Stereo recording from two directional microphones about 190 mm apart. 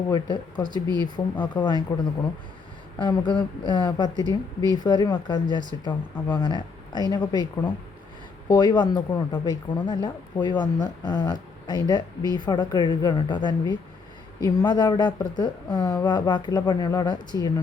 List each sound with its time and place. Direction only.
0.1 s speech: 20° left (ahead or behind)
0.7 s speech: 20° right (ahead or behind)
1.0 s speech: 20° left (ahead or behind)
3.0 s speech: 25° left (ahead or behind)
5.9 s speech: 10° left (ahead or behind)
6.4 s speech: 25° left (ahead or behind)